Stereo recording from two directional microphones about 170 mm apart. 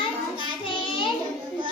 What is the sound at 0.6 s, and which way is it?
Child singing, 30° left (ahead or behind).